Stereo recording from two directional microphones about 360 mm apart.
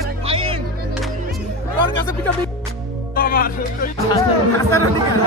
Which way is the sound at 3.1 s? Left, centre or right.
Left.